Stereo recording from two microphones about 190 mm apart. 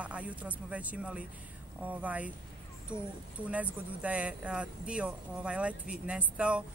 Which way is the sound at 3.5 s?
5° right (ahead or behind).